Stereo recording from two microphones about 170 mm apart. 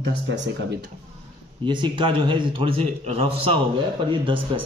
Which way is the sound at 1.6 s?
30° right (ahead or behind).